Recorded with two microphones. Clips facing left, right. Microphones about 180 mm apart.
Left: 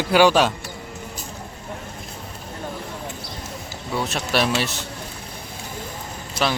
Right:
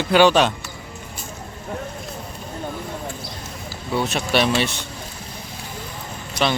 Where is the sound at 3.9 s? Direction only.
Centre (ahead or behind).